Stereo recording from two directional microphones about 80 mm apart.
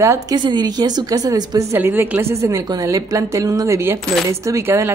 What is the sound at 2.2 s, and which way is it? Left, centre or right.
Speech, right.